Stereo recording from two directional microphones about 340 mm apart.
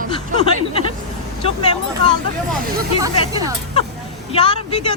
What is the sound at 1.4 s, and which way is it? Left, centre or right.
Speech, centre.